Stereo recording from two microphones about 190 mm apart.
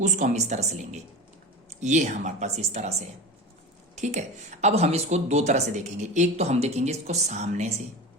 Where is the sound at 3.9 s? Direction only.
40° right (ahead or behind).